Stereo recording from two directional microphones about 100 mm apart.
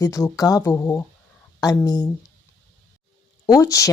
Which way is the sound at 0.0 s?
35° left (ahead or behind).